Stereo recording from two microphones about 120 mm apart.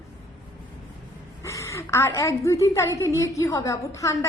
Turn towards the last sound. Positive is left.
turn(degrees=25)  # may be behind; listen again after turning